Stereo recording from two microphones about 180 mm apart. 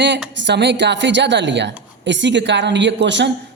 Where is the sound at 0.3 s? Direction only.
75° right (ahead or behind).